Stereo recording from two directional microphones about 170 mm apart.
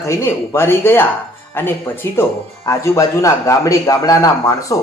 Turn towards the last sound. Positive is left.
turn(degrees=20)  # may be behind; listen again after turning